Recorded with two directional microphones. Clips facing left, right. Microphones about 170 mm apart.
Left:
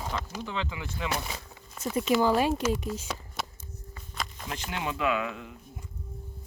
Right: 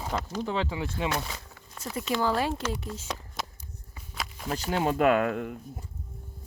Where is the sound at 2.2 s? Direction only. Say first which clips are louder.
Left 2 dB; 15° left (ahead or behind).